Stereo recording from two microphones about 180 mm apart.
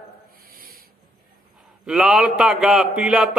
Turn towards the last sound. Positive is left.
turn(degrees=-5)  # may be behind; listen again after turning